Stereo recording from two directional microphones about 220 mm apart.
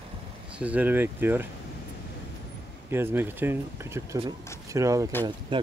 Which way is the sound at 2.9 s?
10° right (ahead or behind).